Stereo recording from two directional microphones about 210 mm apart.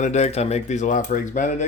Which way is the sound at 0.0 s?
30° left (ahead or behind).